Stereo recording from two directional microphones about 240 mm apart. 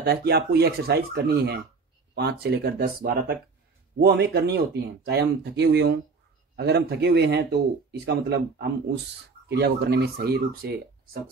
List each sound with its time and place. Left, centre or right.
0.0 s a man's voice: right